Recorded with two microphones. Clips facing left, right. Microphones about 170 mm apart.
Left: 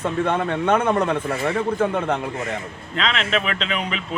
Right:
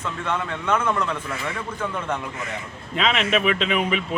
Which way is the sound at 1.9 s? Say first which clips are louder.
Left 5 dB; 60° left (ahead or behind).